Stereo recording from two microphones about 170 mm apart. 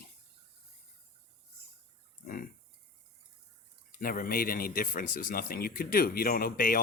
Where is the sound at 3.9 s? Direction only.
55° left (ahead or behind).